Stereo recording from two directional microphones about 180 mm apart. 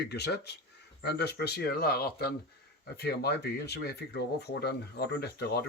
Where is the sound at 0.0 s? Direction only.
65° left (ahead or behind).